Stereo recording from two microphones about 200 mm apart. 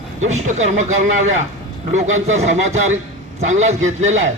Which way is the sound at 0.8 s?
35° right (ahead or behind).